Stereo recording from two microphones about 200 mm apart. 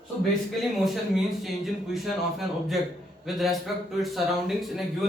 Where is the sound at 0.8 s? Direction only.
Centre (ahead or behind).